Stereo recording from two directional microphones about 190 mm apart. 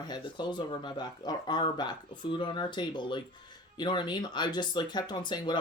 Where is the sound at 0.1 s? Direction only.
25° left (ahead or behind).